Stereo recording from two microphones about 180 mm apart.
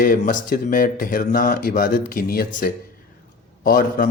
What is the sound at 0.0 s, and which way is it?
A man's voice, 50° left (ahead or behind).